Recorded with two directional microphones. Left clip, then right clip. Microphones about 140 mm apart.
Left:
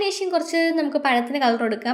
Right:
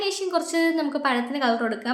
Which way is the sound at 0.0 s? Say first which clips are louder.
Left 2 dB; 10° left (ahead or behind).